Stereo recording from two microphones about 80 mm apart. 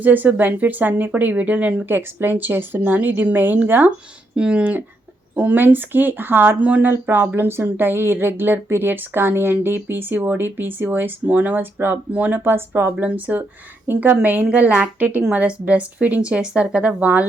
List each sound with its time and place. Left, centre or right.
0.0 s speech: right
2.0 s speech: right